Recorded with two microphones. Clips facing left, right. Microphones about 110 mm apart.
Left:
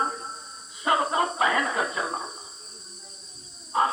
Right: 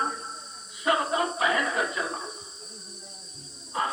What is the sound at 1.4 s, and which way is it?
Music, 35° left (ahead or behind).